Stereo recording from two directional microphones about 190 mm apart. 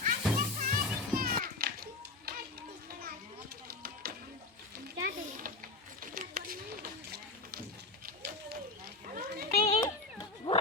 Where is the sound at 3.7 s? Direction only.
55° right (ahead or behind).